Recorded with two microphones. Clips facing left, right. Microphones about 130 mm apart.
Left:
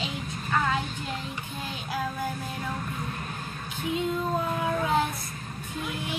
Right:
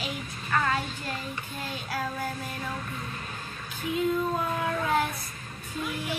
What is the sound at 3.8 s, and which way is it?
Female singing, 25° left (ahead or behind).